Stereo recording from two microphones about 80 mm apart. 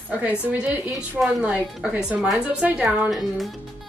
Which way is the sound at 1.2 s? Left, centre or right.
Centre.